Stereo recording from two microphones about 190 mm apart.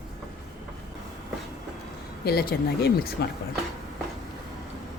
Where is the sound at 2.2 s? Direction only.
55° left (ahead or behind).